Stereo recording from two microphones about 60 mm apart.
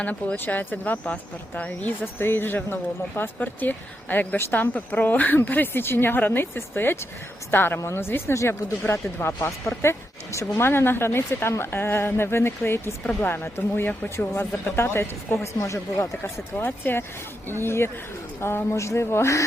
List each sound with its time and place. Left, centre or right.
0.0 s speech: left
2.1 s speech: left
15.5 s speech: left
16.6 s speech: left